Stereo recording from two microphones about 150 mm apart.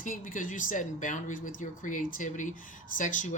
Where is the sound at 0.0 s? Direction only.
60° left (ahead or behind).